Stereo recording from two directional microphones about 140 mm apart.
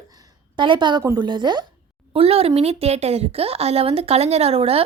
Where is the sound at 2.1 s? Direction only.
45° right (ahead or behind).